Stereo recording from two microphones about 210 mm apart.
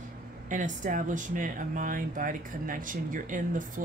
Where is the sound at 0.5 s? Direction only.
35° right (ahead or behind).